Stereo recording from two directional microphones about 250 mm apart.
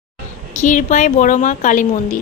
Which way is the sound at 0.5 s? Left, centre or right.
Left.